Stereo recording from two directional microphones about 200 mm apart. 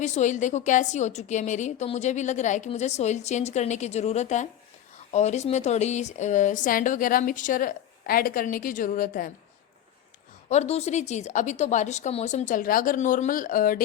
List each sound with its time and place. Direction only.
0.0 s a woman's voice: 35° left (ahead or behind)
10.5 s a woman's voice: 30° left (ahead or behind)